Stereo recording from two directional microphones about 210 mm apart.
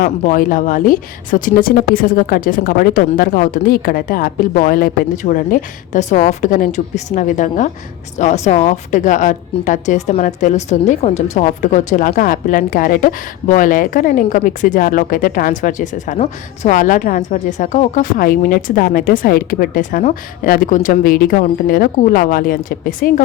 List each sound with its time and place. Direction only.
0.0 s a woman's voice: 40° left (ahead or behind)